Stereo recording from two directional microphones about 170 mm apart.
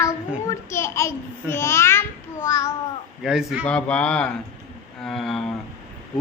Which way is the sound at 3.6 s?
5° left (ahead or behind).